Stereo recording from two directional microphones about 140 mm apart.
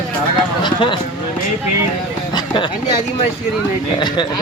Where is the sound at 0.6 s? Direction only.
35° left (ahead or behind).